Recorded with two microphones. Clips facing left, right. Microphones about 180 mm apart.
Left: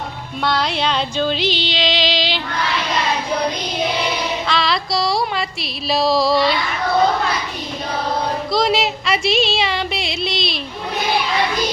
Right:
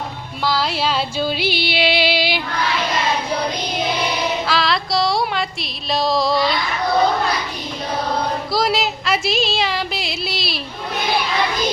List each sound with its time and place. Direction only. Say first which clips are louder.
0.4 s music: even; centre (ahead or behind)
4.4 s music: even; centre (ahead or behind)
8.5 s a sound: left 2 dB; centre (ahead or behind)